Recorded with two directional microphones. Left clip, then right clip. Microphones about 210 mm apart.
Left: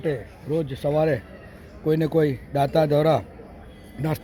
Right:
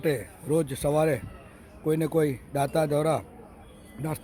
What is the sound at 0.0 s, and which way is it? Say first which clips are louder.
A man's voice: even; 20° right (ahead or behind).